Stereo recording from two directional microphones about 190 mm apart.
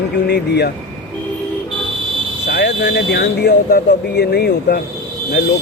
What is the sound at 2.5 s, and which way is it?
Speech, 60° left (ahead or behind).